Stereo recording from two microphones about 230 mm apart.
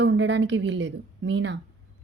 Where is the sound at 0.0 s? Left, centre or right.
Right.